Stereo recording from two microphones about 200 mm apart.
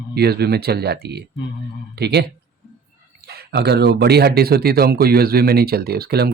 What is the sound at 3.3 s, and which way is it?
Speech, 55° right (ahead or behind).